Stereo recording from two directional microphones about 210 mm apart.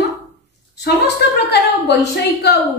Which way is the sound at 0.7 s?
55° left (ahead or behind).